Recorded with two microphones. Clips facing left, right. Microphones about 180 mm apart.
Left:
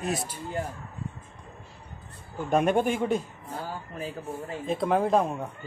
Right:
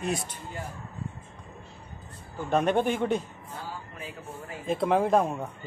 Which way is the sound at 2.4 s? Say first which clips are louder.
Left 1 dB; 10° left (ahead or behind).